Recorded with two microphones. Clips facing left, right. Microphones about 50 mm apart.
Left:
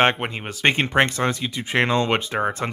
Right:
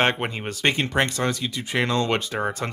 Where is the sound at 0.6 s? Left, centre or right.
Left.